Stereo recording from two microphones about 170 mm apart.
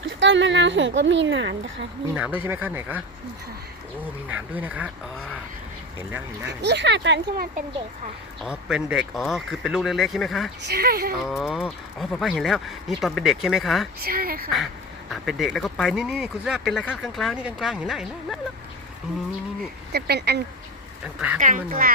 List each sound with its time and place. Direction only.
0.0 s speech: 90° right
2.1 s speech: 10° right (ahead or behind)
4.3 s speech: 10° right (ahead or behind)
6.0 s speech: 10° right (ahead or behind)
6.6 s speech: 85° right
8.4 s speech: 5° right (ahead or behind)
10.7 s speech: 65° right (ahead or behind)
11.3 s speech: centre (ahead or behind)
14.0 s speech: 60° right (ahead or behind)
15.1 s speech: centre (ahead or behind)
19.9 s speech: 70° right (ahead or behind)
21.3 s speech: 50° right (ahead or behind)